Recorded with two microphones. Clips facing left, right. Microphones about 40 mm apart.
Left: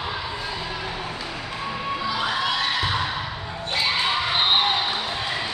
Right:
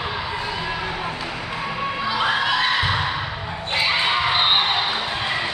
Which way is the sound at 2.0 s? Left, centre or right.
Right.